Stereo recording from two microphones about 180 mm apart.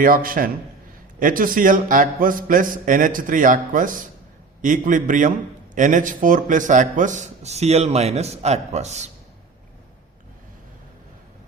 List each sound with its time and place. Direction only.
0.0 s a man's voice: 50° right (ahead or behind)